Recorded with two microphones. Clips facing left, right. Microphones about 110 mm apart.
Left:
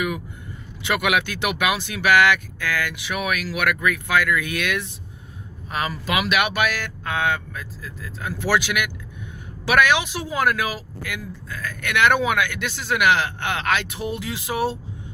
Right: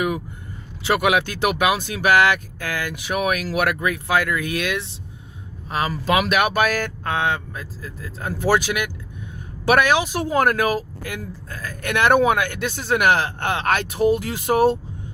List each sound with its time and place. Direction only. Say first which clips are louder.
0.8 s speech: right 3 dB; 35° right (ahead or behind)
13.7 s speech: right 9 dB; 45° right (ahead or behind)